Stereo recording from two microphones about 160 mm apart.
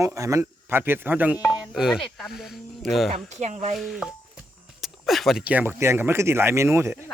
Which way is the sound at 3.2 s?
45° right (ahead or behind).